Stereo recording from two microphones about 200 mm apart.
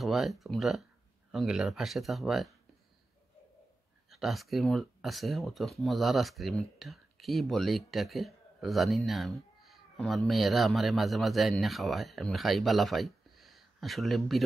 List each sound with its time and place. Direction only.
0.0 s speech: centre (ahead or behind)
4.1 s speech: centre (ahead or behind)